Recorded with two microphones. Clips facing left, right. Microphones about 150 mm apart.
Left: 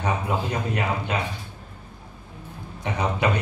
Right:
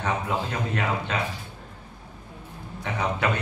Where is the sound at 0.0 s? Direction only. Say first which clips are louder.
Left 1 dB; 15° left (ahead or behind).